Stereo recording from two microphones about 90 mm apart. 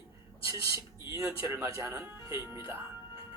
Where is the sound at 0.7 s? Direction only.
25° right (ahead or behind).